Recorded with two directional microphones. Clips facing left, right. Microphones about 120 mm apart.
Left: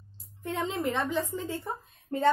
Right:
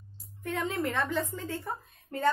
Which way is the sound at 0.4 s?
20° left (ahead or behind).